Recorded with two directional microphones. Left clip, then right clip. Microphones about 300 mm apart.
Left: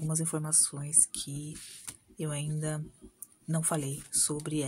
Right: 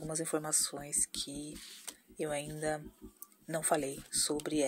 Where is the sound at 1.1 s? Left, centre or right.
Centre.